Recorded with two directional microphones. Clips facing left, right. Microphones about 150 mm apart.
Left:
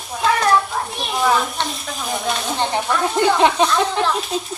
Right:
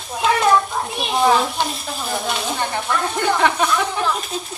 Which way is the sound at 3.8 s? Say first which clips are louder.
Left 3 dB; 20° left (ahead or behind).